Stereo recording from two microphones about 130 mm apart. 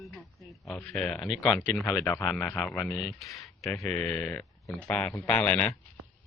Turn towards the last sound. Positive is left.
turn(degrees=10)  # may be behind; listen again after turning